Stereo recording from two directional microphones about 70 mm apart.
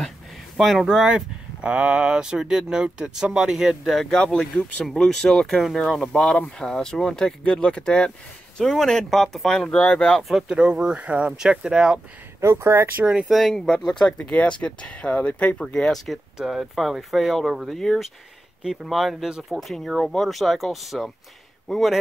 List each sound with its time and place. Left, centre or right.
0.6 s speech: centre
4.0 s speech: centre
9.8 s speech: centre
10.5 s speech: centre
12.4 s speech: right
13.0 s speech: centre
13.3 s speech: centre
15.6 s speech: centre
16.3 s speech: centre
18.6 s speech: centre